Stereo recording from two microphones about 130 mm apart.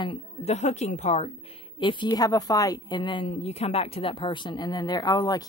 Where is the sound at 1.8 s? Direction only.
35° left (ahead or behind).